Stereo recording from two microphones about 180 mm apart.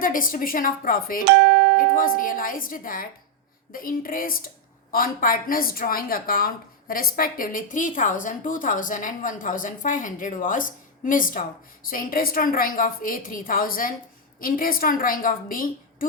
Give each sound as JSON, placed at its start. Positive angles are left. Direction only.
{"t": 0.0, "sound": "a woman's voice", "side_deg": 50}
{"t": 1.4, "sound": "speech", "side_deg": -65}
{"t": 2.0, "sound": "a woman's voice", "side_deg": 50}